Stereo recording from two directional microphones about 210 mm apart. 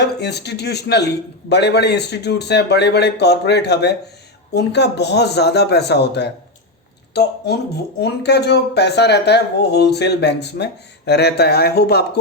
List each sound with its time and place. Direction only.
0.0 s speech: 50° left (ahead or behind)